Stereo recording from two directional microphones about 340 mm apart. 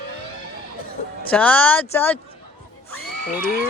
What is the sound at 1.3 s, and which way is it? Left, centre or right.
Speech, centre.